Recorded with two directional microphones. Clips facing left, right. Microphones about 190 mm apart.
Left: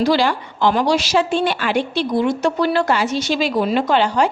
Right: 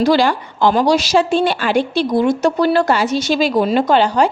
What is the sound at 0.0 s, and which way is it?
Speech, 45° right (ahead or behind).